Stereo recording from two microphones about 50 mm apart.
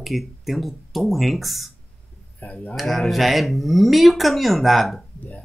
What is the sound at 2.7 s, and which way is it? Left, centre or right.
Speech, centre.